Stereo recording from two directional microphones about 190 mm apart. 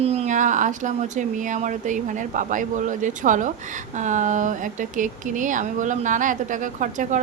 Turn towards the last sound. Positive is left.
turn(degrees=-40)  # may be behind; listen again after turning